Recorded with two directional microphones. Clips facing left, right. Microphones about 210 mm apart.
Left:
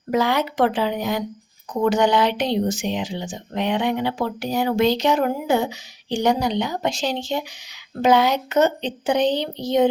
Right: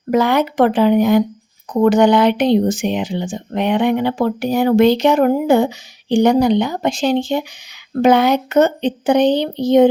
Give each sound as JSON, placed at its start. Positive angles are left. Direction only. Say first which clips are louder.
{"t": 0.1, "sound": "speech", "louder": "right 6 dB", "side_deg": -55}